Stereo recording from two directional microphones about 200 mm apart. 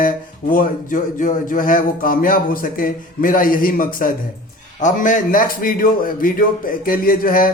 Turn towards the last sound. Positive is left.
turn(degrees=45)  # may be behind; listen again after turning